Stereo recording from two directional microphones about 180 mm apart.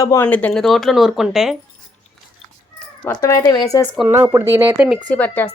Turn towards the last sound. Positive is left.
turn(degrees=10)  # may be behind; listen again after turning